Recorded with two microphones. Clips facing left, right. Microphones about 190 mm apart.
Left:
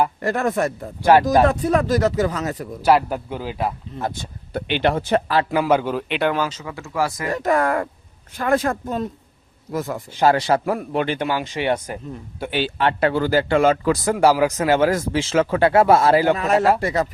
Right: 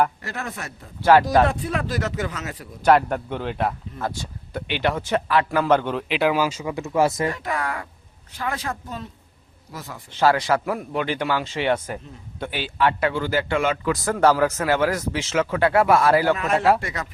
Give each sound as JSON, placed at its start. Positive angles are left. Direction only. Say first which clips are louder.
{"t": 0.2, "sound": "speech", "louder": "left 12 dB", "side_deg": 50}
{"t": 2.8, "sound": "a man's voice", "louder": "even", "side_deg": 5}
{"t": 3.9, "sound": "speech", "louder": "left 2 dB", "side_deg": 20}
{"t": 5.5, "sound": "a man's voice", "louder": "left 2 dB", "side_deg": 10}
{"t": 7.3, "sound": "speech", "louder": "left 9 dB", "side_deg": 45}
{"t": 10.1, "sound": "speech", "louder": "left 1 dB", "side_deg": 15}
{"t": 10.3, "sound": "speech", "louder": "left 3 dB", "side_deg": 30}
{"t": 11.3, "sound": "speech", "louder": "left 1 dB", "side_deg": 15}
{"t": 12.5, "sound": "speech", "louder": "left 2 dB", "side_deg": 30}
{"t": 14.0, "sound": "speech", "louder": "even", "side_deg": 15}
{"t": 16.4, "sound": "speech", "louder": "left 2 dB", "side_deg": 40}